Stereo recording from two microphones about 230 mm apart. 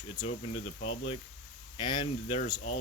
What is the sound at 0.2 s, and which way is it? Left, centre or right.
Speech, centre.